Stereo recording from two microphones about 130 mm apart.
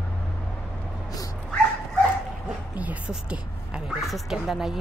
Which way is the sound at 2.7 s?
10° right (ahead or behind).